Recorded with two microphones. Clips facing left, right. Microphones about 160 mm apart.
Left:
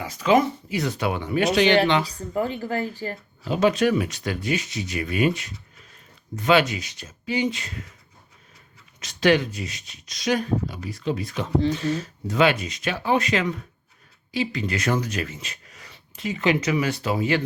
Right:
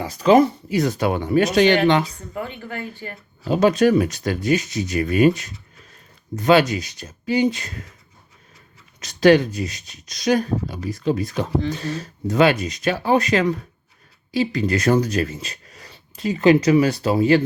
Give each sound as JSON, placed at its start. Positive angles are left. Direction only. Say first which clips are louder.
{"t": 0.0, "sound": "speech", "louder": "right 5 dB", "side_deg": -40}
{"t": 2.0, "sound": "a woman's voice", "louder": "left 5 dB", "side_deg": 35}
{"t": 3.4, "sound": "speech", "louder": "right 4 dB", "side_deg": -40}
{"t": 9.0, "sound": "speech", "louder": "right 6 dB", "side_deg": -40}